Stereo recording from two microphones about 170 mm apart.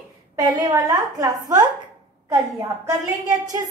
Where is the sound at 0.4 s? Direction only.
20° right (ahead or behind).